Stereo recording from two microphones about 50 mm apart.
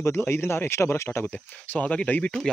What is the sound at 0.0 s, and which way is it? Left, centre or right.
Speech, left.